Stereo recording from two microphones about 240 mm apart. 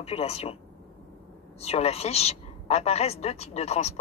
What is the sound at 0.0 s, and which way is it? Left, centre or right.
Speech, left.